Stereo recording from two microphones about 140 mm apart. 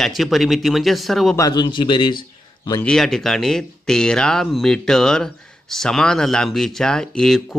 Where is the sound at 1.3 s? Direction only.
25° left (ahead or behind).